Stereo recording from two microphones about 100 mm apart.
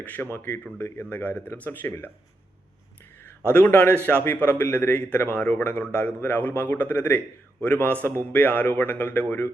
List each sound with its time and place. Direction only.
0.0 s a man's voice: 15° left (ahead or behind)
0.3 s a man's voice: 25° left (ahead or behind)
3.2 s a man's voice: 20° left (ahead or behind)